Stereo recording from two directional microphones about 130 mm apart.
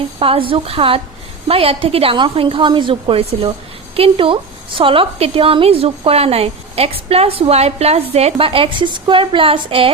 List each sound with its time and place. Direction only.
0.2 s a woman's voice: 45° right (ahead or behind)